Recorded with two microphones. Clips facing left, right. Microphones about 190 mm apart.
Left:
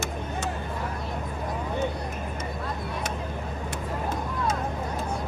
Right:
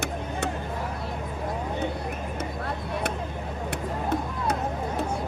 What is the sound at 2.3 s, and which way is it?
Vehicle, 65° right (ahead or behind).